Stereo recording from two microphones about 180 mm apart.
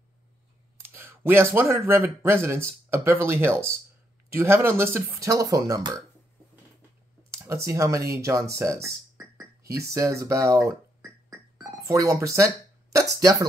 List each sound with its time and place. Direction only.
0.7 s speech: 10° right (ahead or behind)
7.3 s speech: 15° right (ahead or behind)
11.0 s music: centre (ahead or behind)
11.8 s speech: 20° right (ahead or behind)